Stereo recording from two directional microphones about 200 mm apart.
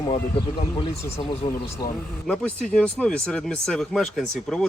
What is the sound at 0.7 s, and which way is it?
Speech, 5° left (ahead or behind).